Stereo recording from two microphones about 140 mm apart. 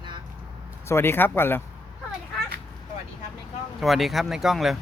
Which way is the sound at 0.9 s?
15° left (ahead or behind).